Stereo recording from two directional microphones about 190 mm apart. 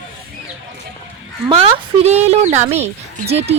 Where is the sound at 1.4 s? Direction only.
30° right (ahead or behind).